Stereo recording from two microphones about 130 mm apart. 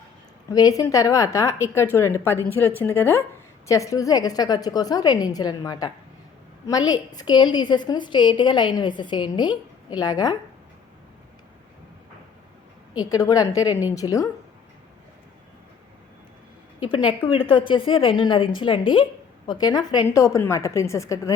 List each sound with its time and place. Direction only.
0.5 s a woman's voice: 25° left (ahead or behind)
13.0 s a woman's voice: 30° left (ahead or behind)
16.8 s a woman's voice: 40° left (ahead or behind)